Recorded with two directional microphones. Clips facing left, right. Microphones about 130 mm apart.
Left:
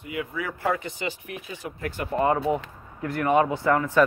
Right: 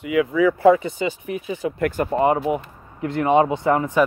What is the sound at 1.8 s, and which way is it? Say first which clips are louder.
Speech: right 9 dB; 45° right (ahead or behind).